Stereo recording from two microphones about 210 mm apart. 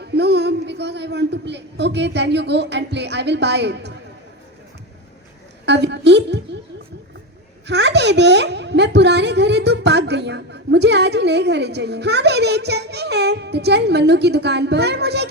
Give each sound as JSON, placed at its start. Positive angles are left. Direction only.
{"t": 0.0, "sound": "a woman's voice", "side_deg": -50}
{"t": 5.6, "sound": "a woman's voice", "side_deg": -55}
{"t": 7.7, "sound": "speech", "side_deg": -55}